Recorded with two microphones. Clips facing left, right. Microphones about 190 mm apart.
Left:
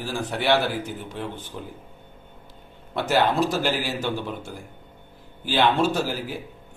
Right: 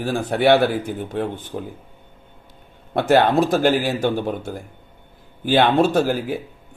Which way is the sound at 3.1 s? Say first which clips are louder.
Right 6 dB; 55° right (ahead or behind).